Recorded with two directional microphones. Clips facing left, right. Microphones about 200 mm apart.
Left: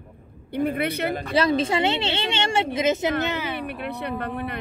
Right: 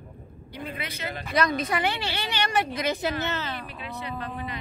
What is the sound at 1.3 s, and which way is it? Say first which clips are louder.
A woman's voice: left 3 dB; 30° left (ahead or behind).